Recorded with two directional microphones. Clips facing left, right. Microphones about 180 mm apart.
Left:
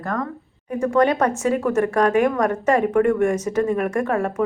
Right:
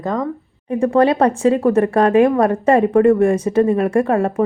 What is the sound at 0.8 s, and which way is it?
A woman's voice, 30° right (ahead or behind).